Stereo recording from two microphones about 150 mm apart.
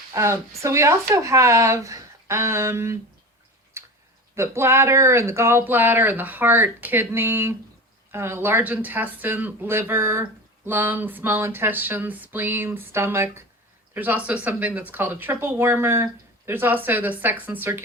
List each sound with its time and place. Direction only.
0.1 s speech: 20° right (ahead or behind)
3.8 s tick-tock: 15° right (ahead or behind)
4.4 s speech: 15° right (ahead or behind)